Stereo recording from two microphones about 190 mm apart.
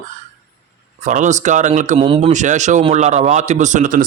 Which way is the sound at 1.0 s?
40° right (ahead or behind).